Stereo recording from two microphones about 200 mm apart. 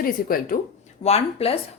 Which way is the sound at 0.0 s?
45° left (ahead or behind).